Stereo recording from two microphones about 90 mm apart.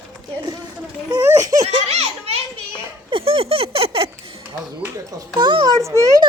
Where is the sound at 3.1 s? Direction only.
90° right.